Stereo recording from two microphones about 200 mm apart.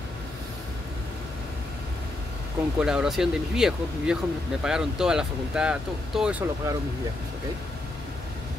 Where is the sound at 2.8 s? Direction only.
5° right (ahead or behind).